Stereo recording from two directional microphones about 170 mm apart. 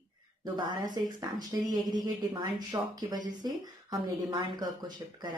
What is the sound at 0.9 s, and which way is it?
Speech, 25° right (ahead or behind).